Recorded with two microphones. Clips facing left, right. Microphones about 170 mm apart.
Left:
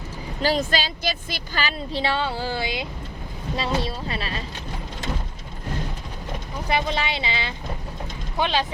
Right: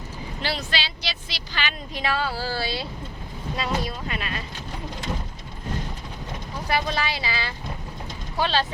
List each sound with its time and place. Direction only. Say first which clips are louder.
0.4 s a woman's voice: left 7 dB; 45° left (ahead or behind); by 2.8 s 20° left (ahead or behind)
3.6 s a woman's voice: left 2 dB; 30° left (ahead or behind)
6.7 s a woman's voice: left 1 dB; 20° left (ahead or behind)